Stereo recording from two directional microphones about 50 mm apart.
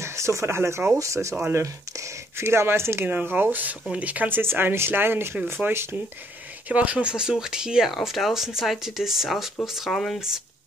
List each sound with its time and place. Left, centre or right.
0.0 s speech: right
1.5 s a sound: right
2.4 s speech: right
3.1 s speech: right
4.3 s speech: right
6.7 s speech: right
7.9 s speech: centre